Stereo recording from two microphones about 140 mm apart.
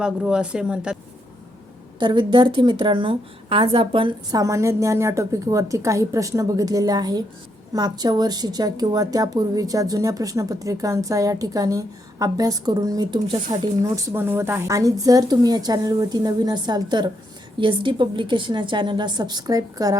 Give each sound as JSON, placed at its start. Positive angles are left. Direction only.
{"t": 0.0, "sound": "speech", "side_deg": -5}
{"t": 2.0, "sound": "a woman's voice", "side_deg": -35}